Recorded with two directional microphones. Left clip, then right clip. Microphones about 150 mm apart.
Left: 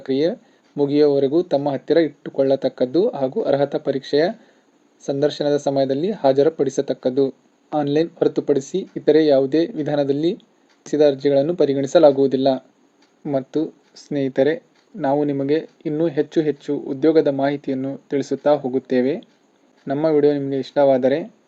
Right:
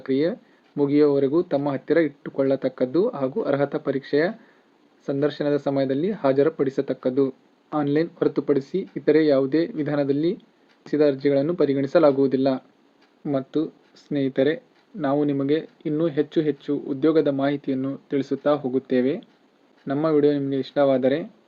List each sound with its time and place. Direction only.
0.0 s speech: 15° left (ahead or behind)